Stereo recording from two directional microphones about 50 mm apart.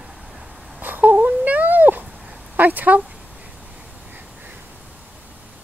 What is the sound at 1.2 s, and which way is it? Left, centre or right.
Cat, right.